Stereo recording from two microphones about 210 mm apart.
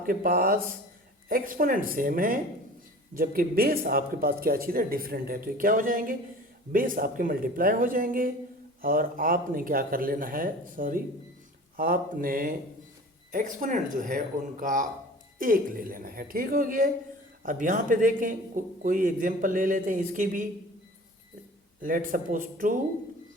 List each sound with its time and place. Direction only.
0.0 s a man's voice: 40° right (ahead or behind)
21.8 s a man's voice: 40° right (ahead or behind)